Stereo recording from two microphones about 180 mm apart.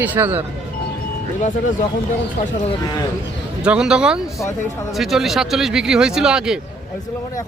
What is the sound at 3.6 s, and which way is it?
Speech, 5° right (ahead or behind).